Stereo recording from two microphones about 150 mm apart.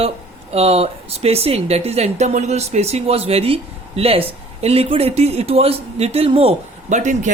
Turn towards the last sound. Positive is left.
turn(degrees=-55)  # may be behind; listen again after turning